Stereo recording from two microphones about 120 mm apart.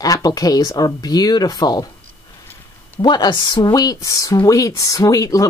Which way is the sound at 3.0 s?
35° left (ahead or behind).